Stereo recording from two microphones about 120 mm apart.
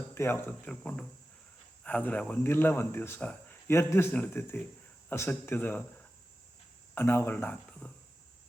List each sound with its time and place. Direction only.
0.1 s speech: 20° left (ahead or behind)